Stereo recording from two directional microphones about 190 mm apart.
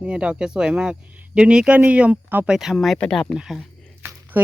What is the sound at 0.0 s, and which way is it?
Speech, 5° right (ahead or behind).